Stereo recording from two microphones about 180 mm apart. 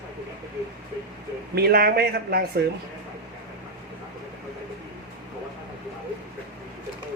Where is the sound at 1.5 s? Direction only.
60° right (ahead or behind).